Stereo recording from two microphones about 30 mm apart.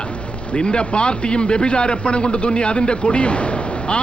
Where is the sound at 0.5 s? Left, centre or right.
Left.